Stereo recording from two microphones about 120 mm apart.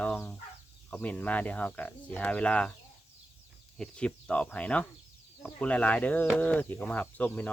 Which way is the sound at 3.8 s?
10° left (ahead or behind).